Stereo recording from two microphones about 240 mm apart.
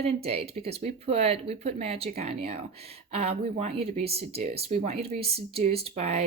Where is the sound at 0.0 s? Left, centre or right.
Right.